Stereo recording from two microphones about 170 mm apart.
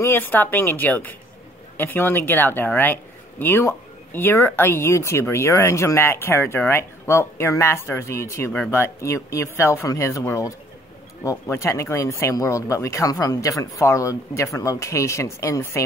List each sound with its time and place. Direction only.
0.0 s speech: 10° left (ahead or behind)